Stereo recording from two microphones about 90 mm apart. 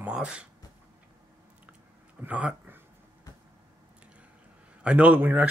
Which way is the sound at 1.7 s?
15° right (ahead or behind).